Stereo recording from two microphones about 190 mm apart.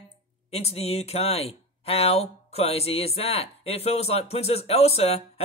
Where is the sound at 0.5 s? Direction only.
35° left (ahead or behind).